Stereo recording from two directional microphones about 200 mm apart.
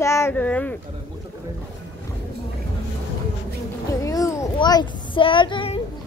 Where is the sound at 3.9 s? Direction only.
15° left (ahead or behind).